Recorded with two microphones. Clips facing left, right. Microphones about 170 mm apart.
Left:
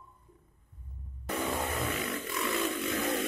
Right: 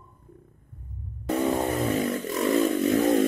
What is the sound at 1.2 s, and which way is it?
Vehicle, 35° right (ahead or behind).